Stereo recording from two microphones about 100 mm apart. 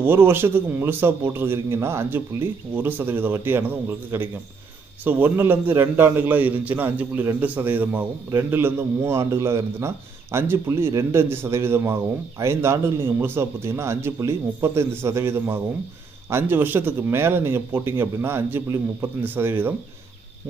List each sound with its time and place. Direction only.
0.0 s a man's voice: 20° right (ahead or behind)